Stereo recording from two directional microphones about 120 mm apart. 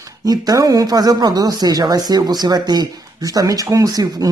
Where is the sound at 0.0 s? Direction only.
30° right (ahead or behind).